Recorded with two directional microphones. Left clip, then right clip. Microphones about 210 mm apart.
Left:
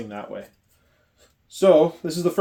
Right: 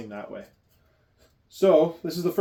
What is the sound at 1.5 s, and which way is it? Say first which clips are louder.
Speech: left 3 dB; 30° left (ahead or behind).